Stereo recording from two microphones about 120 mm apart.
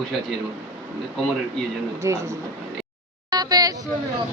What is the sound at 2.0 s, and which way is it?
Speech, 25° right (ahead or behind).